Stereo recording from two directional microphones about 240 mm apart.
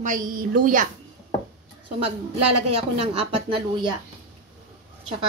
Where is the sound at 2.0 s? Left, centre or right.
Right.